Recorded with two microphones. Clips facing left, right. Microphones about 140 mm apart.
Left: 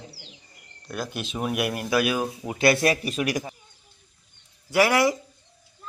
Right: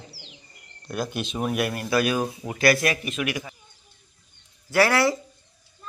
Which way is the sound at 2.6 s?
25° left (ahead or behind).